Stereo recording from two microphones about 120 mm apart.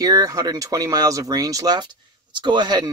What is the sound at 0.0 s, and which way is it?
Speech, 30° right (ahead or behind).